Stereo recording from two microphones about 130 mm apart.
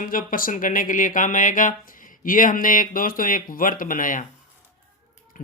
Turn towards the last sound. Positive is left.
turn(degrees=90)